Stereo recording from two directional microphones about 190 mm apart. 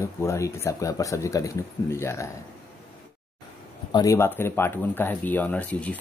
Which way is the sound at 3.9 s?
15° left (ahead or behind).